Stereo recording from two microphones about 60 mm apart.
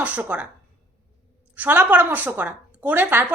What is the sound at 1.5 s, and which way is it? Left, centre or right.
A woman's voice, right.